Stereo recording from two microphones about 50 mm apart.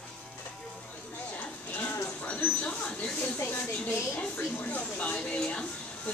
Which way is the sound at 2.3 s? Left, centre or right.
Left.